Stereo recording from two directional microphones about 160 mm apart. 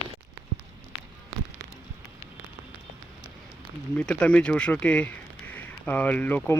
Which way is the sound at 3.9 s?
5° left (ahead or behind).